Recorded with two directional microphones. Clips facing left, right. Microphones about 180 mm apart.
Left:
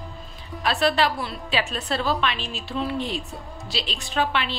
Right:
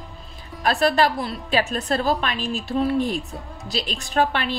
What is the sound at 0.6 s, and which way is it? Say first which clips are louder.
Speech: right 3 dB; 45° right (ahead or behind).